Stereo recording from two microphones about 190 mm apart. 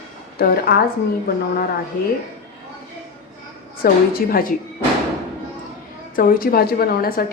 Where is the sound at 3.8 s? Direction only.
50° left (ahead or behind).